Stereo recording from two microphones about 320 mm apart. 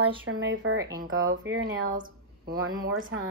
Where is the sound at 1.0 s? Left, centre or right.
Right.